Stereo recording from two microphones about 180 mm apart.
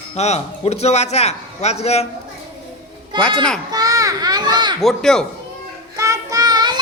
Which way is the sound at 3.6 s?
20° right (ahead or behind).